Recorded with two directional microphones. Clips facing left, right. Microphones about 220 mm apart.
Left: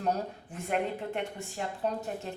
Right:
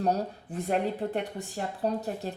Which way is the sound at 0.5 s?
35° right (ahead or behind).